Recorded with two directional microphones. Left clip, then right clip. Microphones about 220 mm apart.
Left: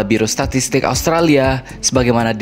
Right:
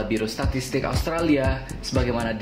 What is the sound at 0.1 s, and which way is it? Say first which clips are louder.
Speech: left 10 dB; 50° left (ahead or behind).